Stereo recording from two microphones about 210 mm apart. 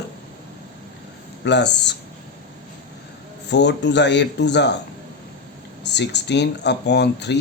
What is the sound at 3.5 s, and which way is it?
Speech, 55° left (ahead or behind).